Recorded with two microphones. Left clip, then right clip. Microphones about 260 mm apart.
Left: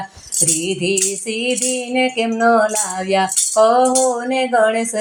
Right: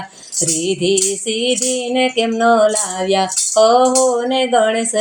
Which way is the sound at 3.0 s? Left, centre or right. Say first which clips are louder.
Right 1 dB; left.